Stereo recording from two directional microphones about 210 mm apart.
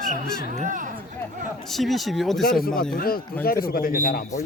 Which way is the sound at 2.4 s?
45° left (ahead or behind).